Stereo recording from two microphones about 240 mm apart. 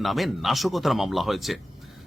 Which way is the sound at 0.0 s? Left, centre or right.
Centre.